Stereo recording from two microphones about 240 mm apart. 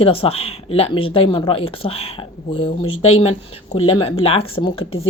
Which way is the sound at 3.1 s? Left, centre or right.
Left.